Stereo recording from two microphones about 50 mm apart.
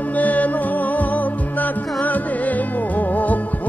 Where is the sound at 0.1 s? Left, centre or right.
Left.